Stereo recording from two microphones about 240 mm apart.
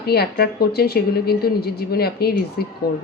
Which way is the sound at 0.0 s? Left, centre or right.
Left.